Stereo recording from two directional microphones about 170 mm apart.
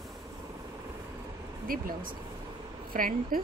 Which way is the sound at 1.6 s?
55° right (ahead or behind).